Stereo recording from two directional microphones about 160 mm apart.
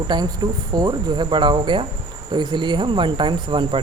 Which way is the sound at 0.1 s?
25° right (ahead or behind).